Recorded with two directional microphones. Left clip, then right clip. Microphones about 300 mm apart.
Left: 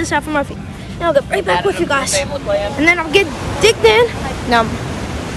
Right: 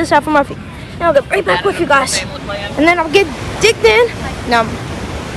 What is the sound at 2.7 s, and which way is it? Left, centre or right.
Speech, centre.